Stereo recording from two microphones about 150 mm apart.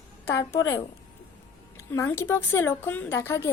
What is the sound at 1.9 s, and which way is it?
A woman's voice, 15° left (ahead or behind).